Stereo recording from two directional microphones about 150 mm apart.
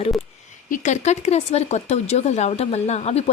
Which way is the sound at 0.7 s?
55° left (ahead or behind).